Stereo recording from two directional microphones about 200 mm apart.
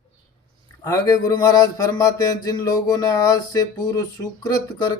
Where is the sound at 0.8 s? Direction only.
15° left (ahead or behind).